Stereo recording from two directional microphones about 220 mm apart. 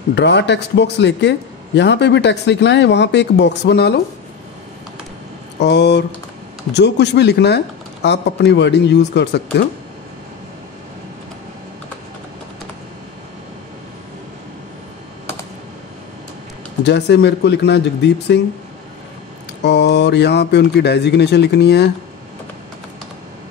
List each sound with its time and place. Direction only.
0.1 s speech: 50° left (ahead or behind)
5.6 s speech: 50° left (ahead or behind)
16.8 s speech: 50° left (ahead or behind)
19.6 s speech: 50° left (ahead or behind)